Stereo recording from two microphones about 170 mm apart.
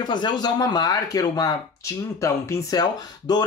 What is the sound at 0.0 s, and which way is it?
Speech, 25° left (ahead or behind).